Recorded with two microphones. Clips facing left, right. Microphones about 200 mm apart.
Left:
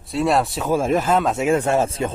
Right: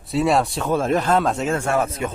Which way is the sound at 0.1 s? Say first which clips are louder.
Even; centre (ahead or behind).